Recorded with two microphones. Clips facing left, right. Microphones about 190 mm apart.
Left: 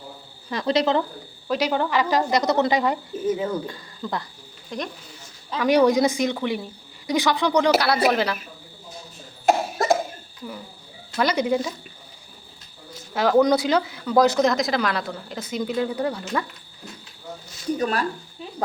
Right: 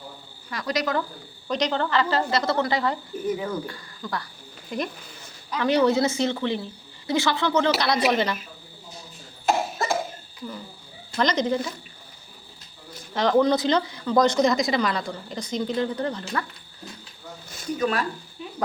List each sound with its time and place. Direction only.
0.5 s speech: 30° left (ahead or behind)
1.5 s speech: 5° left (ahead or behind)
4.7 s speech: 5° right (ahead or behind)
5.5 s speech: 15° left (ahead or behind)
9.5 s cough: 40° left (ahead or behind)
11.2 s speech: 10° left (ahead or behind)
13.1 s speech: 5° left (ahead or behind)
17.7 s speech: 40° left (ahead or behind)